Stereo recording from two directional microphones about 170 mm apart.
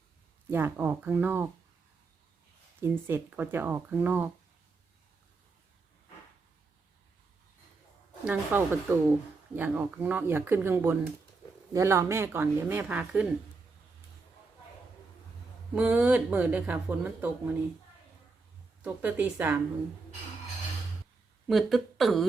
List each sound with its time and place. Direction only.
0.5 s speech: 10° right (ahead or behind)
2.8 s speech: 15° right (ahead or behind)
8.3 s speech: 10° right (ahead or behind)
15.7 s speech: 10° right (ahead or behind)
18.8 s speech: 10° right (ahead or behind)
21.4 s speech: centre (ahead or behind)